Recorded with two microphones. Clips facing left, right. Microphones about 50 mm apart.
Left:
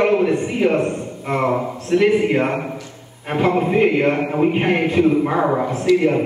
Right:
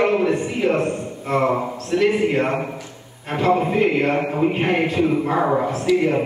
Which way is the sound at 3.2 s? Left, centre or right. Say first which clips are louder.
Left 3 dB; centre.